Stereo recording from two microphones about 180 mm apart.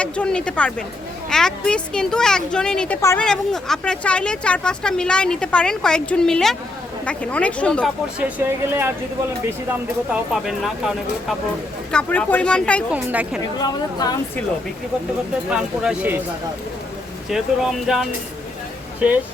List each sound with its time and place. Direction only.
0.0 s speech: 5° left (ahead or behind)
3.0 s speech: 15° left (ahead or behind)
3.2 s speech: 5° left (ahead or behind)
8.2 s speech: 10° right (ahead or behind); by 12.8 s 5° left (ahead or behind)
12.9 s speech: 5° right (ahead or behind)
13.4 s a woman's voice: 20° left (ahead or behind)
15.4 s speech: 5° right (ahead or behind)
17.2 s speech: centre (ahead or behind)